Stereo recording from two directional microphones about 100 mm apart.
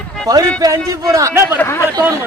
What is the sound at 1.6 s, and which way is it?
Speech, 25° left (ahead or behind).